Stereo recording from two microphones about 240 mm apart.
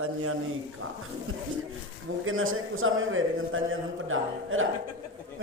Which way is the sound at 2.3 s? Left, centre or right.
Right.